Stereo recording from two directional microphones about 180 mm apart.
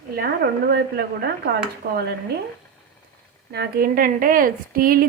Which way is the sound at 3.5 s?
55° right (ahead or behind).